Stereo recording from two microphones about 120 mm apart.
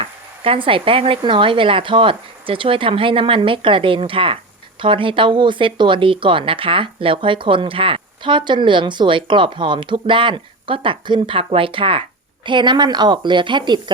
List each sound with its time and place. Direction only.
0.0 s a woman's voice: 50° right (ahead or behind)